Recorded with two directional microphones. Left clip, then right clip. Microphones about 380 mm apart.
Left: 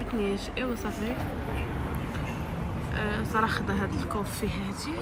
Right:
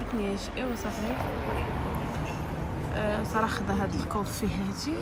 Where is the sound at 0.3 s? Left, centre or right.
Centre.